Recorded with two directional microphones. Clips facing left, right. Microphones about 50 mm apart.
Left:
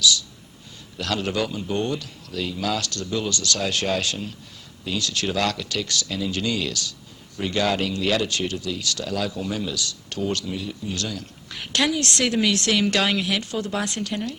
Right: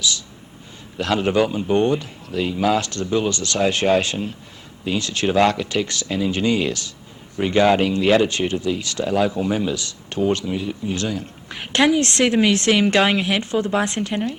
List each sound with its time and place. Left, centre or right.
0.0 s speech: right